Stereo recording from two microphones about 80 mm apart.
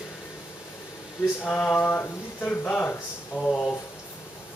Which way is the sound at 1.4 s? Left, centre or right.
Centre.